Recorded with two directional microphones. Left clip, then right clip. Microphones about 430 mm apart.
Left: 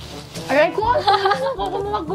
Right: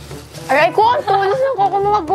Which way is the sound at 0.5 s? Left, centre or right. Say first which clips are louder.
Right 5 dB; right.